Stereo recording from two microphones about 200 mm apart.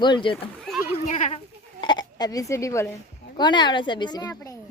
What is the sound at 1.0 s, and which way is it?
Speech, 35° left (ahead or behind).